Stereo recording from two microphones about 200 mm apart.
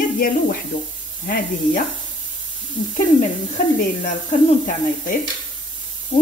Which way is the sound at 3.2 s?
40° left (ahead or behind).